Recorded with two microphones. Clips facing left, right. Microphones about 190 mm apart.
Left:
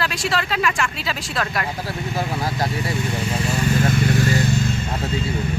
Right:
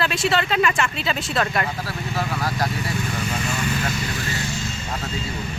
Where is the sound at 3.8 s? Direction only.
55° left (ahead or behind).